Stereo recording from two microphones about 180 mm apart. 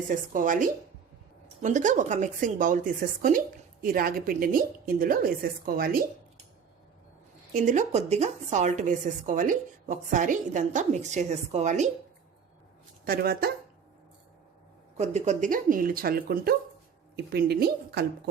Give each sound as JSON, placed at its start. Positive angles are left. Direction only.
{"t": 0.1, "sound": "a woman's voice", "side_deg": -45}
{"t": 7.5, "sound": "a woman's voice", "side_deg": -45}
{"t": 13.1, "sound": "a woman's voice", "side_deg": -55}
{"t": 14.9, "sound": "a woman's voice", "side_deg": -40}